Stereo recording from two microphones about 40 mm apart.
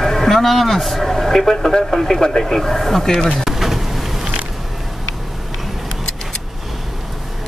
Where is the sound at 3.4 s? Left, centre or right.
Centre.